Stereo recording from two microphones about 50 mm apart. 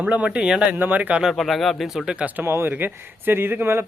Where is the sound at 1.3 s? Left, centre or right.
Centre.